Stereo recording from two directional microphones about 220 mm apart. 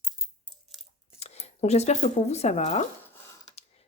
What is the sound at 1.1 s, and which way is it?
Speech, 30° left (ahead or behind).